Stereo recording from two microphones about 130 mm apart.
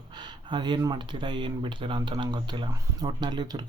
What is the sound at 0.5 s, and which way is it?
Speech, 35° right (ahead or behind).